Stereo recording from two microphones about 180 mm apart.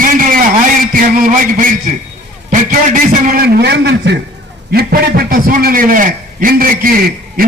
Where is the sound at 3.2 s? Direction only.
55° right (ahead or behind); by 4.1 s 70° right (ahead or behind).